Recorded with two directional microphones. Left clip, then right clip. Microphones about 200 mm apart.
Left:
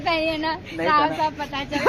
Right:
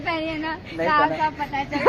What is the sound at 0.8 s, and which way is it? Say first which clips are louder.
Speech: even; 20° left (ahead or behind).